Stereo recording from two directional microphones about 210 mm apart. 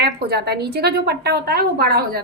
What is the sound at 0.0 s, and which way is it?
A woman's voice, 50° right (ahead or behind).